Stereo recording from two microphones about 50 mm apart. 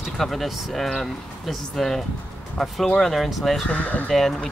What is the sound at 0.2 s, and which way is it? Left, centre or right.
Speech, centre.